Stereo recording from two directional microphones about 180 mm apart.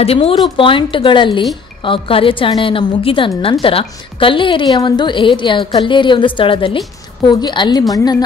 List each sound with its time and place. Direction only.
0.0 s a woman's voice: 35° left (ahead or behind)